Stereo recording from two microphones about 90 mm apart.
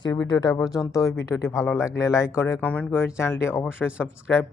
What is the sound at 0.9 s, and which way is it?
Speech, 35° left (ahead or behind).